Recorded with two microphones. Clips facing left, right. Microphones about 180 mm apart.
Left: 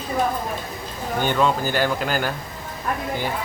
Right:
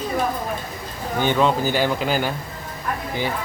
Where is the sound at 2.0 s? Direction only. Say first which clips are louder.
Right 2 dB; 5° right (ahead or behind).